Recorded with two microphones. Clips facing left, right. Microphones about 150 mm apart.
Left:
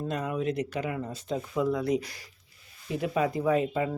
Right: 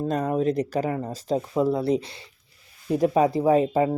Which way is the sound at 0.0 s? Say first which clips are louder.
Right 7 dB; 40° right (ahead or behind).